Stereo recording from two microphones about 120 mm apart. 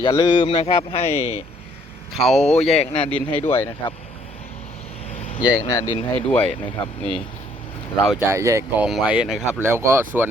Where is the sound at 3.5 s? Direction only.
20° left (ahead or behind).